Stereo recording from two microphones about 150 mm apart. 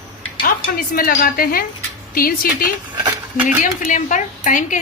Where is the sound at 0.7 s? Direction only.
75° left (ahead or behind).